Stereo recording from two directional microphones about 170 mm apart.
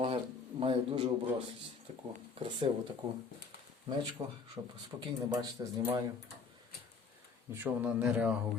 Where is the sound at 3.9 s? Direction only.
30° right (ahead or behind).